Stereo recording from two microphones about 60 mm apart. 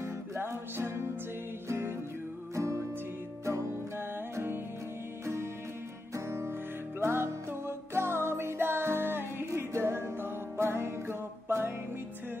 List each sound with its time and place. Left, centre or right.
0.0 s music: right
2.5 s music: right
5.2 s music: right